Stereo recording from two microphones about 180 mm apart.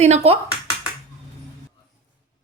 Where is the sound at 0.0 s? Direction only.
40° right (ahead or behind).